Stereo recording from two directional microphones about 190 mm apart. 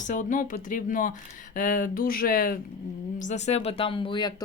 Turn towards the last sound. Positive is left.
turn(degrees=20)  # may be behind; listen again after turning